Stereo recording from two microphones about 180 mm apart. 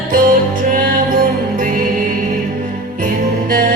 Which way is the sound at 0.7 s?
50° right (ahead or behind).